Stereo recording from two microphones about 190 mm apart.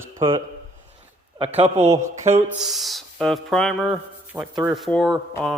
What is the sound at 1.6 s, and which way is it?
Speech, 35° right (ahead or behind).